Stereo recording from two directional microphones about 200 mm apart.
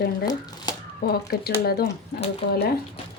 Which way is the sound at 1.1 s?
50° left (ahead or behind).